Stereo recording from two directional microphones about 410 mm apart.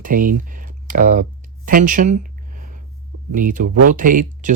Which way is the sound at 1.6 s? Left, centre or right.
Centre.